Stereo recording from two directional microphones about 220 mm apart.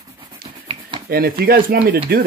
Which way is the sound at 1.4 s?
45° right (ahead or behind).